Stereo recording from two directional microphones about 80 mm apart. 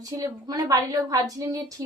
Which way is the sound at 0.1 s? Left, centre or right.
Right.